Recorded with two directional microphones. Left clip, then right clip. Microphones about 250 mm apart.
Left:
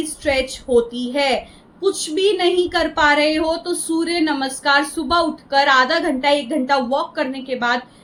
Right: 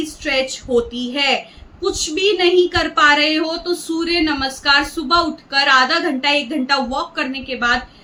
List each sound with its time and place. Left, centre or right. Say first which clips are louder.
0.3 s a woman's voice: even; centre